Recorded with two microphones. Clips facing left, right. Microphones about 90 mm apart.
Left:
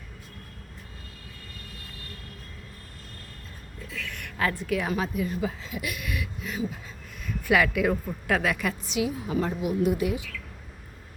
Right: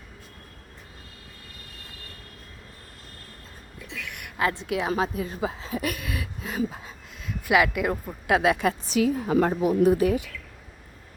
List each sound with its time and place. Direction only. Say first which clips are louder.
3.8 s a woman's voice: even; 20° right (ahead or behind); by 6.6 s 35° right (ahead or behind)
7.4 s speech: right 1 dB; 10° right (ahead or behind)
8.3 s a woman's voice: right 5 dB; 20° right (ahead or behind)
8.9 s a woman's voice: right 5 dB; 50° right (ahead or behind)